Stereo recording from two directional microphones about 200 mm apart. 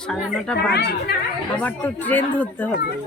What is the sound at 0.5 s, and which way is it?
Speech, 55° left (ahead or behind).